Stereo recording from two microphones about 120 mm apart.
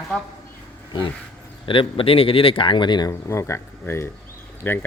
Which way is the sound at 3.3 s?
25° left (ahead or behind).